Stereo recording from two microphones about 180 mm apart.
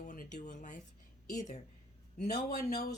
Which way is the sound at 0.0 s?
45° left (ahead or behind).